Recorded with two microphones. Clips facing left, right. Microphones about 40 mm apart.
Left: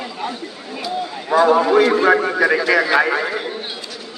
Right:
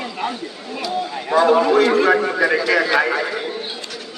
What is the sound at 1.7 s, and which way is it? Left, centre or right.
A man's voice, centre.